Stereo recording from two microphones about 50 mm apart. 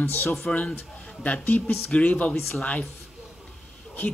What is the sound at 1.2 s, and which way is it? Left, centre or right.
A woman's voice, left.